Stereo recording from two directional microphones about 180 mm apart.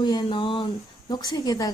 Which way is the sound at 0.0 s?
25° left (ahead or behind).